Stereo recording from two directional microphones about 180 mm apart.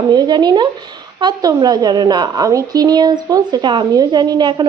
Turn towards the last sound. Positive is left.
turn(degrees=-25)  # may be behind; listen again after turning